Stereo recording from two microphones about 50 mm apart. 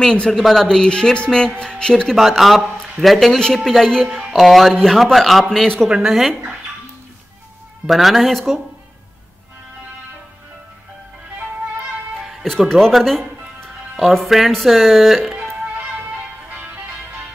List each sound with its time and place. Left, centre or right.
0.0 s a woman's voice: centre
2.1 s speech: centre
5.9 s speech: centre
7.8 s speech: centre
12.2 s music: centre
12.4 s a woman's voice: centre
13.7 s music: centre
14.2 s speech: centre
16.4 s music: right